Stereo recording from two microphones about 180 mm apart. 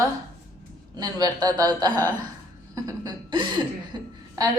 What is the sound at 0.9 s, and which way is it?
A woman's voice, 20° right (ahead or behind).